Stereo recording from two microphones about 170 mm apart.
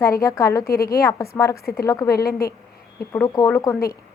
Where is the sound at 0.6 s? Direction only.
60° left (ahead or behind).